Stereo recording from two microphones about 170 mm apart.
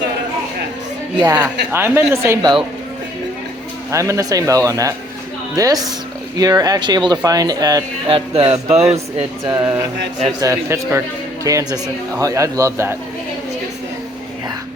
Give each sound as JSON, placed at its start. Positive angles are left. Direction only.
{"t": 1.1, "sound": "speech", "side_deg": -25}
{"t": 1.7, "sound": "speech", "side_deg": -10}
{"t": 3.9, "sound": "speech", "side_deg": -15}
{"t": 8.1, "sound": "music", "side_deg": -35}
{"t": 9.4, "sound": "speech", "side_deg": -20}